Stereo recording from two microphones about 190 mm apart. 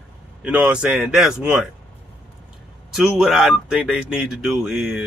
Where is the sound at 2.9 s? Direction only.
Centre (ahead or behind).